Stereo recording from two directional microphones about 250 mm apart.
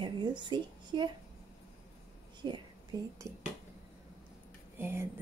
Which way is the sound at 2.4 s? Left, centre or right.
Centre.